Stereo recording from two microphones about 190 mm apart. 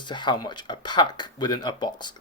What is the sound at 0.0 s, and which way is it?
Speech, 25° left (ahead or behind).